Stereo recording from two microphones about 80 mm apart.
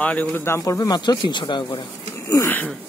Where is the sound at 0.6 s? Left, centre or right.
Left.